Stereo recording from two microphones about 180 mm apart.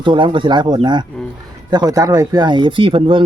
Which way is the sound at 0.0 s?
25° right (ahead or behind).